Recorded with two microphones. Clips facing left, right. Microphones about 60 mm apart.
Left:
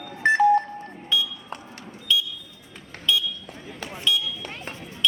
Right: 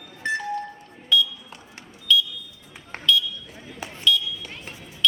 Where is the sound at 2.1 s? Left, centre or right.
Left.